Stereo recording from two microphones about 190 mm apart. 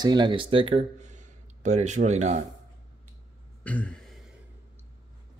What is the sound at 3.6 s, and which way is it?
Throat clearing, 5° left (ahead or behind).